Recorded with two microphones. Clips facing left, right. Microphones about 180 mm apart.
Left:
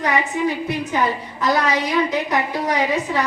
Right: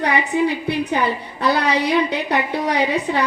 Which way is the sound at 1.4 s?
65° right (ahead or behind).